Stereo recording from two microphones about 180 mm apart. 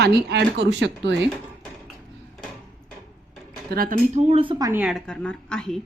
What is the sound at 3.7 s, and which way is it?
Speech, 50° right (ahead or behind).